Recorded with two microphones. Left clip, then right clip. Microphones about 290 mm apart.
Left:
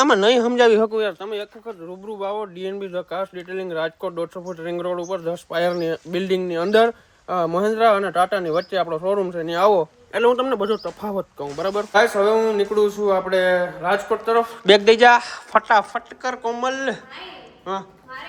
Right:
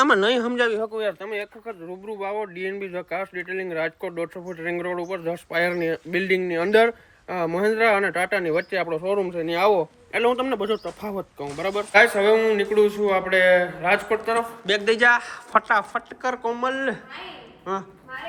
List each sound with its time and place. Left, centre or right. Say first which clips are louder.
0.0 s a man's voice: left 3 dB; centre
10.5 s speech: left 3 dB; left
11.2 s speech: left 3 dB; centre
12.5 s speech: left 1 dB; left
13.1 s a woman's voice: right 3 dB; centre